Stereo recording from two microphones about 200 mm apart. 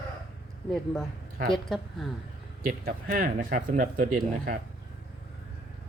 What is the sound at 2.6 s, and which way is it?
Speech, 45° right (ahead or behind).